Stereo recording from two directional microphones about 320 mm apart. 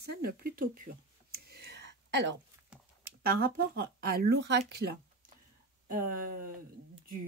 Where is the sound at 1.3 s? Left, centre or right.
Right.